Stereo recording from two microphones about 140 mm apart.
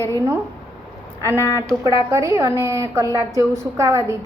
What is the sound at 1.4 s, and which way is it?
Speech, 20° left (ahead or behind).